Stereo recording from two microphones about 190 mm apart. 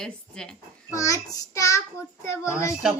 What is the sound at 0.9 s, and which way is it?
Child singing, 15° left (ahead or behind).